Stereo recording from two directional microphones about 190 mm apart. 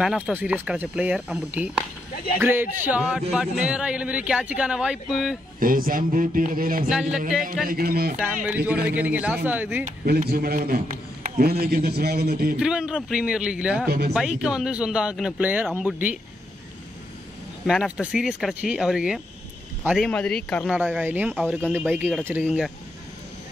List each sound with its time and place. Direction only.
0.0 s a man's voice: 5° right (ahead or behind)
5.6 s a man's voice: 50° right (ahead or behind)
6.9 s a man's voice: 5° right (ahead or behind)
7.6 s a man's voice: 50° right (ahead or behind)
8.5 s speech: 10° right (ahead or behind)
9.8 s a man's voice: 55° right (ahead or behind)
12.5 s a man's voice: 5° right (ahead or behind)
13.8 s speech: 55° right (ahead or behind)
14.4 s a man's voice: 5° right (ahead or behind)
17.6 s a man's voice: centre (ahead or behind)
20.1 s a man's voice: 5° left (ahead or behind)
20.7 s speech: 5° right (ahead or behind)